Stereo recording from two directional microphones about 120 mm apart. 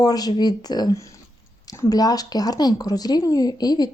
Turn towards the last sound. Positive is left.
turn(degrees=35)  # may be behind; listen again after turning